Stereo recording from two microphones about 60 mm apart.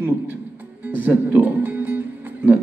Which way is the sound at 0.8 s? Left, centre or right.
Right.